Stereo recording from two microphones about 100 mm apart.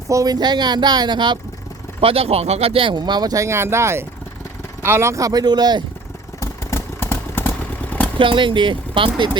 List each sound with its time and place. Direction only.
0.1 s speech: 35° right (ahead or behind)
2.0 s speech: 70° right (ahead or behind); by 5.8 s 45° right (ahead or behind)
6.4 s vehicle: 25° left (ahead or behind)
8.2 s speech: 55° right (ahead or behind)